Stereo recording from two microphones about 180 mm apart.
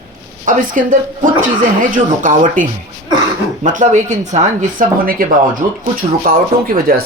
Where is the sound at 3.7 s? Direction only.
40° right (ahead or behind).